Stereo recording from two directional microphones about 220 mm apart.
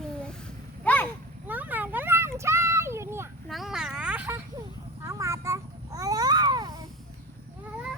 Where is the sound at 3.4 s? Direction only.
Centre (ahead or behind).